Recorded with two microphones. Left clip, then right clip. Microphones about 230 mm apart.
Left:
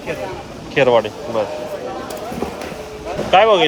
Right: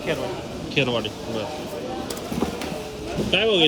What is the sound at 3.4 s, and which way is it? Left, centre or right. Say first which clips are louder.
Speech: left 7 dB; left.